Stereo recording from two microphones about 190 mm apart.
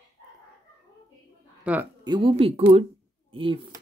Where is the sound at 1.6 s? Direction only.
10° right (ahead or behind).